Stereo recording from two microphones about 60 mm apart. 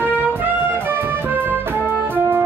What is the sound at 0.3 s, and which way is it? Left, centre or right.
Music, right.